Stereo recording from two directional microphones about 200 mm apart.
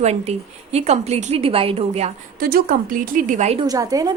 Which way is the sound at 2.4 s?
45° right (ahead or behind).